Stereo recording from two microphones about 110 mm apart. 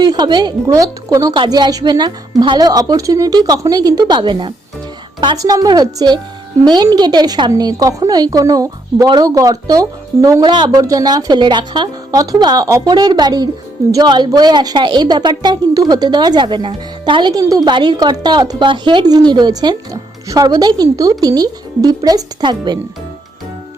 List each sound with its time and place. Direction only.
0.0 s a woman's voice: 40° right (ahead or behind)
5.4 s a woman's voice: 35° right (ahead or behind)
10.4 s speech: 45° right (ahead or behind)
10.7 s a woman's voice: 30° right (ahead or behind)